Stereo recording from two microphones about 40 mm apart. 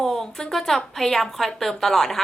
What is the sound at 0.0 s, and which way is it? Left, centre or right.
A woman's voice, centre.